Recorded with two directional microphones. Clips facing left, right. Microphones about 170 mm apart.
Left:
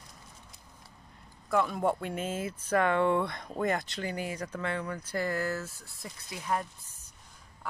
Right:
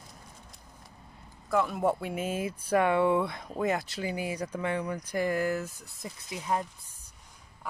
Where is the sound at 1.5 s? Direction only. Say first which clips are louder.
Right 1 dB; 5° right (ahead or behind).